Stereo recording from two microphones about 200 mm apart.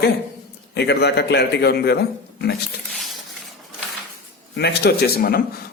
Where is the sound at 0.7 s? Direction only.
55° left (ahead or behind).